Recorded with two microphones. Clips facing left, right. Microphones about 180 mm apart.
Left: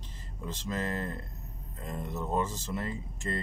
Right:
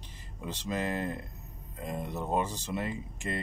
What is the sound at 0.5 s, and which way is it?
Speech, 15° right (ahead or behind).